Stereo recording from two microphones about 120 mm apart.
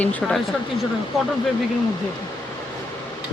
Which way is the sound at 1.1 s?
Centre (ahead or behind).